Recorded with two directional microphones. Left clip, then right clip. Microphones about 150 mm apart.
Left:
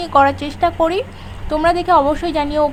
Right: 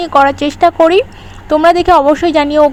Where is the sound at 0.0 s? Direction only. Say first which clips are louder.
Right 4 dB; 40° right (ahead or behind).